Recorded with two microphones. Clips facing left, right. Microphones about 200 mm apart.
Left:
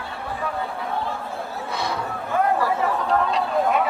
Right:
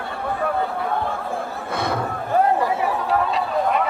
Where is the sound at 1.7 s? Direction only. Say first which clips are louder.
Right 4 dB; 55° right (ahead or behind).